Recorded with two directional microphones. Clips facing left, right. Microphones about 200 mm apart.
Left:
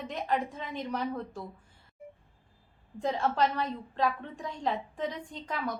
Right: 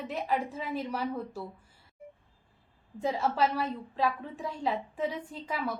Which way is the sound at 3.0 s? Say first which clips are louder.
Even; 5° right (ahead or behind).